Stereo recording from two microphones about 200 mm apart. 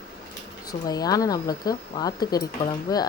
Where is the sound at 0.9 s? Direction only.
20° left (ahead or behind).